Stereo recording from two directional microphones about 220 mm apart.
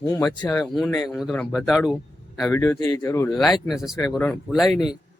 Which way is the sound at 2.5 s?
15° left (ahead or behind).